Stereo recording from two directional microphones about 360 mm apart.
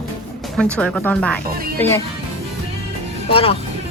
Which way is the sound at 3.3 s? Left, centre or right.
Centre.